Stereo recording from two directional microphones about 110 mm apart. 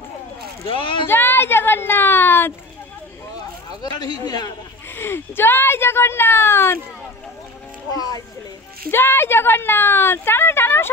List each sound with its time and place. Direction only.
0.7 s speech: 50° left (ahead or behind)
1.0 s speech: 20° left (ahead or behind)
3.8 s speech: 40° left (ahead or behind)
4.9 s speech: 20° left (ahead or behind)
8.9 s speech: 20° left (ahead or behind)